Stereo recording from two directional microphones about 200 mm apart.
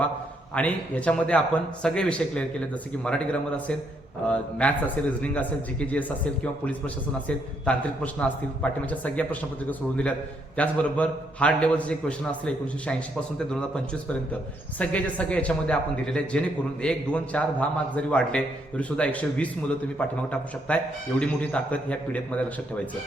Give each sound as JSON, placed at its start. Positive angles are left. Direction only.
{"t": 0.5, "sound": "a man's voice", "side_deg": 5}
{"t": 4.3, "sound": "a man's voice", "side_deg": 5}
{"t": 14.8, "sound": "a man's voice", "side_deg": 5}